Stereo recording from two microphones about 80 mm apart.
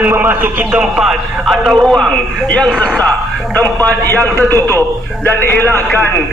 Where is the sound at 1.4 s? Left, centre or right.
Centre.